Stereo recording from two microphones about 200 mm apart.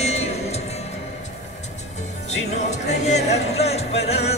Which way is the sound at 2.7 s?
35° left (ahead or behind).